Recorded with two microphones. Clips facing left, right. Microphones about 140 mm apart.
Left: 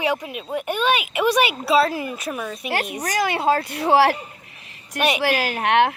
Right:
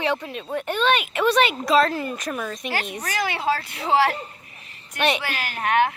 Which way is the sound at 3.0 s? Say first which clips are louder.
Left 4 dB; 40° left (ahead or behind).